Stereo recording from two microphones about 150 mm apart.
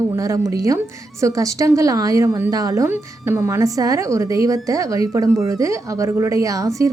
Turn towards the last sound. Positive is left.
turn(degrees=-20)  # may be behind; listen again after turning